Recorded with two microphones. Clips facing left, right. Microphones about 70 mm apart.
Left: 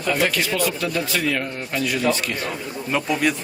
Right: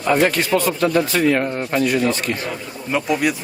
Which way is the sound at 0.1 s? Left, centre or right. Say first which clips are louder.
Right 5 dB; right.